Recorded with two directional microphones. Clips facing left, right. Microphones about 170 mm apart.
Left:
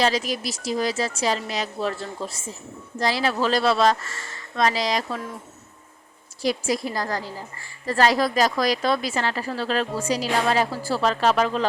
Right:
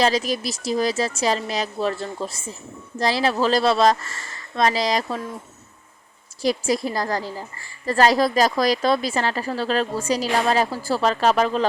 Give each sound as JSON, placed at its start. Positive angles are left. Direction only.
{"t": 0.0, "sound": "a woman's voice", "side_deg": -40}
{"t": 3.0, "sound": "a woman's voice", "side_deg": -35}
{"t": 6.4, "sound": "a woman's voice", "side_deg": -35}